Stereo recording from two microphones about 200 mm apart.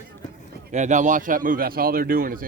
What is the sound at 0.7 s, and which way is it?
Speech, 40° right (ahead or behind).